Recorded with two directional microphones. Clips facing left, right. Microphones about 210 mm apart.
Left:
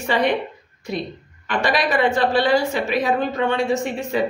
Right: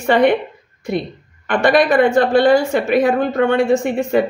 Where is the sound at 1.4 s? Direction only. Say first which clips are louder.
Right 7 dB; 50° right (ahead or behind).